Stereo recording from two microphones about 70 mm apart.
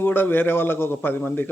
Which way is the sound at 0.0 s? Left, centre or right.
Left.